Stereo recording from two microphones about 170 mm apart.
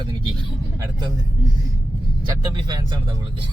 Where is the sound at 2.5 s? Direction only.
25° right (ahead or behind).